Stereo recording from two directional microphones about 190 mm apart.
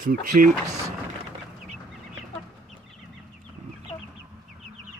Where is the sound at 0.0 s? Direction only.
45° right (ahead or behind).